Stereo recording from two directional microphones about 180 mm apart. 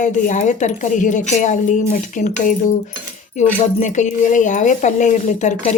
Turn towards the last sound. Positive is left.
turn(degrees=40)  # may be behind; listen again after turning